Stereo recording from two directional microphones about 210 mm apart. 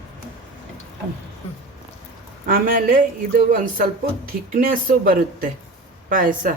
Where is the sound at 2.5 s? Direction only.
40° right (ahead or behind).